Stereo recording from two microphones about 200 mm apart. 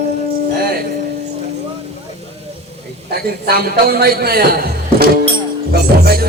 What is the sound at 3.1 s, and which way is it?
A man's voice, 50° right (ahead or behind).